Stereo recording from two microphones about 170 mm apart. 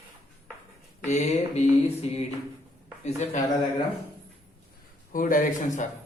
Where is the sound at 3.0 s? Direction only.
45° left (ahead or behind).